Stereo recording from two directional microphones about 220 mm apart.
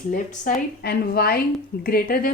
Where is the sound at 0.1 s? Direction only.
45° left (ahead or behind).